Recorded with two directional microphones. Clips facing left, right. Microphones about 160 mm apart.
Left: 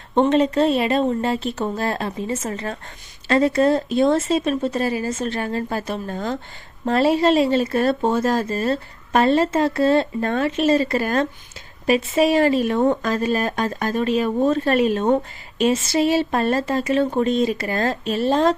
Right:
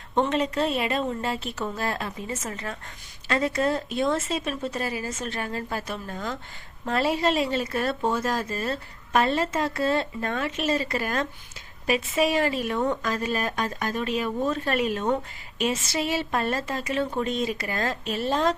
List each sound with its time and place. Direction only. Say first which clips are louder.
0.1 s speech: left 7 dB; 30° left (ahead or behind)